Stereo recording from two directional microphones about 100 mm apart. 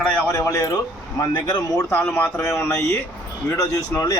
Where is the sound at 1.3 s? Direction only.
45° left (ahead or behind).